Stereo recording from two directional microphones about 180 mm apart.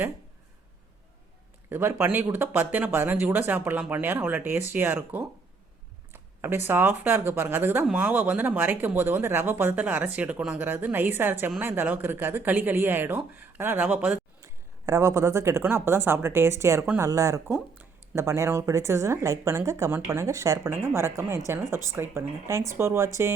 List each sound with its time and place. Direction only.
1.7 s speech: 15° right (ahead or behind)
6.1 s a sound: 10° right (ahead or behind)
6.7 s speech: 10° right (ahead or behind)